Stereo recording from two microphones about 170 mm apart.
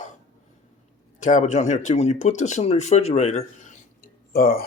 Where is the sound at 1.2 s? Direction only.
45° left (ahead or behind).